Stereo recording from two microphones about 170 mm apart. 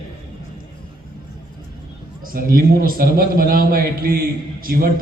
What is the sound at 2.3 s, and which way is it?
A man's voice, 60° right (ahead or behind).